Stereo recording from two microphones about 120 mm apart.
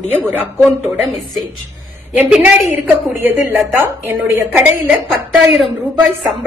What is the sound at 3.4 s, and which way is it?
A woman's voice, 25° right (ahead or behind).